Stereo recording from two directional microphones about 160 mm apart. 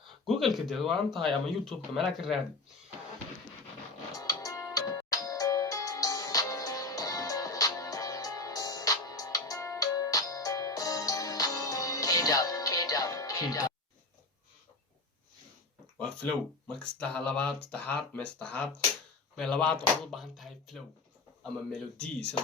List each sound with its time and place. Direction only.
0.3 s speech: centre (ahead or behind)
4.2 s music: 20° left (ahead or behind)
16.0 s speech: 5° left (ahead or behind)